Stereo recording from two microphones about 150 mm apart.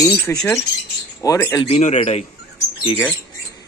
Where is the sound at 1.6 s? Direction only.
45° left (ahead or behind).